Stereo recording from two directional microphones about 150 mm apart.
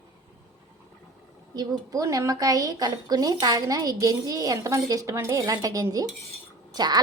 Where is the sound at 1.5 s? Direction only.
25° right (ahead or behind).